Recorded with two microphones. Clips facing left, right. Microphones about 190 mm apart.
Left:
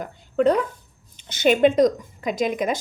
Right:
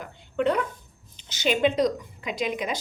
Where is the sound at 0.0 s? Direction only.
40° left (ahead or behind).